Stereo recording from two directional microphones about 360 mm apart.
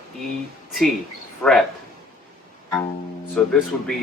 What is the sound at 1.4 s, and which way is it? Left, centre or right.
Speech, centre.